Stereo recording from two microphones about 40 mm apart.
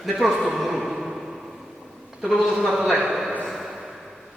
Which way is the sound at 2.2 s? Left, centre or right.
Centre.